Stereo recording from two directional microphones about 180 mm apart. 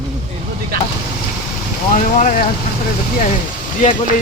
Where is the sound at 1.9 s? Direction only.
45° left (ahead or behind).